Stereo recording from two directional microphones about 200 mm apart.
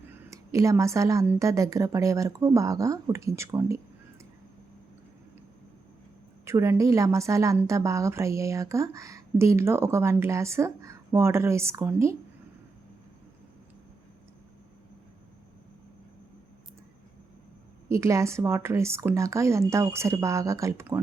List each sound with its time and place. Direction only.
0.1 s a woman's voice: 15° right (ahead or behind)
6.4 s a woman's voice: 15° right (ahead or behind)
17.8 s a woman's voice: 15° right (ahead or behind)